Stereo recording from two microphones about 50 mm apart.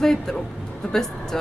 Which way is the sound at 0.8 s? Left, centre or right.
Left.